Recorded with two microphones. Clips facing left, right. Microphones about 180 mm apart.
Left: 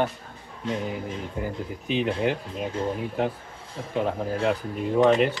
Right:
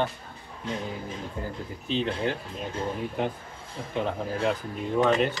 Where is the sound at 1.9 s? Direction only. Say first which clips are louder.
Left 3 dB; 15° left (ahead or behind).